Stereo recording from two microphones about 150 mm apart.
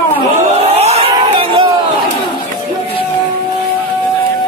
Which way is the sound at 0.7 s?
40° right (ahead or behind).